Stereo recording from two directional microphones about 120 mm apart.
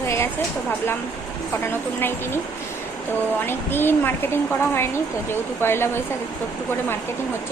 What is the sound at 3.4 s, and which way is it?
A woman's voice, 20° left (ahead or behind).